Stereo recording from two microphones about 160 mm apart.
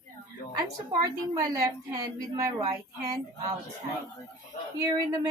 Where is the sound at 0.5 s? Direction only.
25° right (ahead or behind).